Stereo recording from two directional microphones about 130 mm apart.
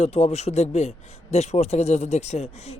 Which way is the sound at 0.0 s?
55° left (ahead or behind).